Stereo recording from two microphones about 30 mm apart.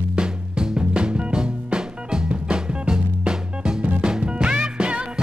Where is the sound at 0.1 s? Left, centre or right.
Right.